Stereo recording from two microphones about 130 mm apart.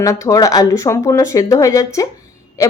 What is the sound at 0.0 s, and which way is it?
Speech, 25° left (ahead or behind).